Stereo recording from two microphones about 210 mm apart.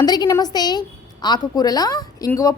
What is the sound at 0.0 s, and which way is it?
A woman's voice, 20° left (ahead or behind).